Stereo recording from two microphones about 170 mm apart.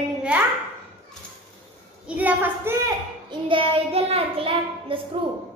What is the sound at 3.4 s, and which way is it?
Child singing, 30° right (ahead or behind).